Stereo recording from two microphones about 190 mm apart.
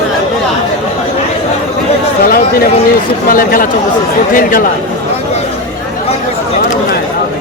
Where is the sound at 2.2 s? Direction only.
50° left (ahead or behind).